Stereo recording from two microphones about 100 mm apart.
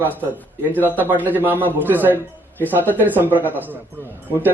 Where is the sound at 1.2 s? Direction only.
20° right (ahead or behind).